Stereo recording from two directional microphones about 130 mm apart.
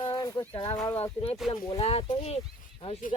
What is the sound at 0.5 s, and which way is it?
Speech, 45° left (ahead or behind).